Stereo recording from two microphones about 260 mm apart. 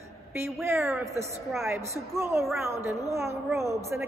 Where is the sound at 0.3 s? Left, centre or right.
Centre.